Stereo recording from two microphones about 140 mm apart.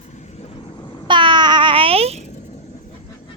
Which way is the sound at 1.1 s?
35° right (ahead or behind).